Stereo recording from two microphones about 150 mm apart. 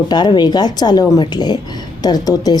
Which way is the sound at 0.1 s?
30° left (ahead or behind).